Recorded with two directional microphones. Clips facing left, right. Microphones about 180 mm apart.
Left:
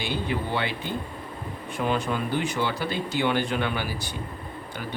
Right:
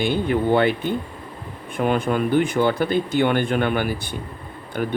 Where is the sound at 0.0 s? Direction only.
55° right (ahead or behind).